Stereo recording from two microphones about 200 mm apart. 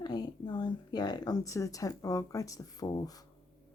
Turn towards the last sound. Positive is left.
turn(degrees=20)  # may be behind; listen again after turning